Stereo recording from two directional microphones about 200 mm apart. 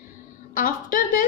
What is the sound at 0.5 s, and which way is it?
Speech, 45° left (ahead or behind).